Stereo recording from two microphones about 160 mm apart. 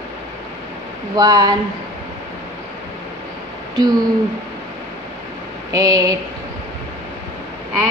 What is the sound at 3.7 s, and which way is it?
Speech, 25° right (ahead or behind).